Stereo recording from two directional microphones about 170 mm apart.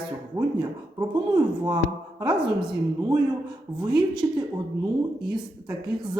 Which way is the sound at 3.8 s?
25° right (ahead or behind).